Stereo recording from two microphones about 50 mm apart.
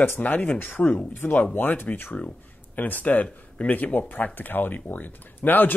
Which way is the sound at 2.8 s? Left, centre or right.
Left.